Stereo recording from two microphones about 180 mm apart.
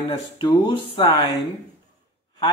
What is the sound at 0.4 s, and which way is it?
Speech, 25° left (ahead or behind).